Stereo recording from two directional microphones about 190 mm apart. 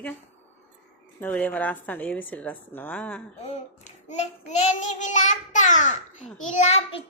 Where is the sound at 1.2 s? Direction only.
10° left (ahead or behind).